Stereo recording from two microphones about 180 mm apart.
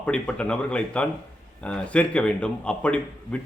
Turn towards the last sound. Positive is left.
turn(degrees=5)  # may be behind; listen again after turning